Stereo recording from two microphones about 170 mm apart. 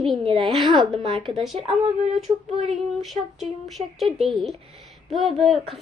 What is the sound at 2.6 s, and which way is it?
Speech, centre (ahead or behind).